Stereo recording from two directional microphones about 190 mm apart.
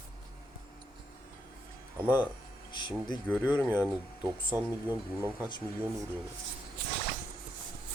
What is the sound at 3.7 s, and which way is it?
Speech, 10° right (ahead or behind).